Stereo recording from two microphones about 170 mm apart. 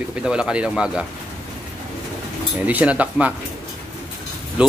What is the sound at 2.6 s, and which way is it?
Speech, 10° right (ahead or behind).